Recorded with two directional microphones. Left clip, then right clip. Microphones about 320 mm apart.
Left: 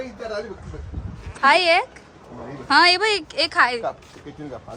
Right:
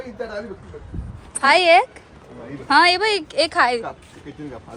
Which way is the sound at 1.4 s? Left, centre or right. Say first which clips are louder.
Right 3 dB; centre.